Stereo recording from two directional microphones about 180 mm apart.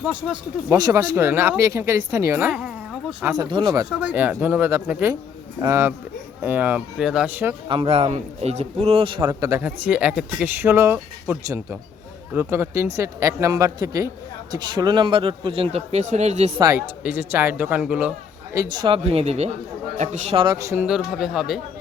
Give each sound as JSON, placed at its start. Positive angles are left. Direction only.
{"t": 0.0, "sound": "speech", "side_deg": -5}
{"t": 0.8, "sound": "speech", "side_deg": -20}
{"t": 3.3, "sound": "speech", "side_deg": -25}
{"t": 3.8, "sound": "speech", "side_deg": -10}
{"t": 7.7, "sound": "a man's voice", "side_deg": -30}
{"t": 9.8, "sound": "a man's voice", "side_deg": -5}
{"t": 16.6, "sound": "speech", "side_deg": -15}
{"t": 18.5, "sound": "a man's voice", "side_deg": -20}
{"t": 20.4, "sound": "speech", "side_deg": -20}
{"t": 20.8, "sound": "speech", "side_deg": -5}